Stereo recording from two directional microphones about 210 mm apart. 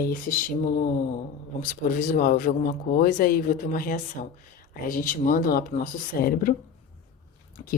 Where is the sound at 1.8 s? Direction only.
40° left (ahead or behind).